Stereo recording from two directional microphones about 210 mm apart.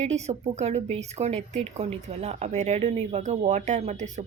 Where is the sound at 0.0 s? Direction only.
35° right (ahead or behind).